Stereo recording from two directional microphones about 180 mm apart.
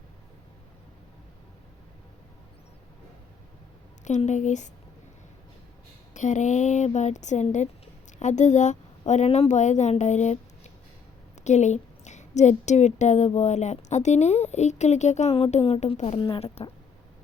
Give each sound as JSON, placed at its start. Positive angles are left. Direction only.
{"t": 4.0, "sound": "a woman's voice", "side_deg": 40}
{"t": 6.1, "sound": "a woman's voice", "side_deg": 40}